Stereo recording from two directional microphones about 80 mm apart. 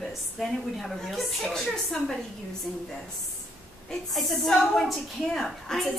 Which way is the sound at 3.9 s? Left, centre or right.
Centre.